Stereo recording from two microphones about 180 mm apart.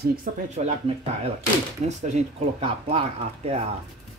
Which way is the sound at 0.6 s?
35° right (ahead or behind).